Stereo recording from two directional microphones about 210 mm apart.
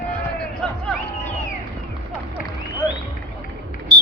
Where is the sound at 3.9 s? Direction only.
20° right (ahead or behind).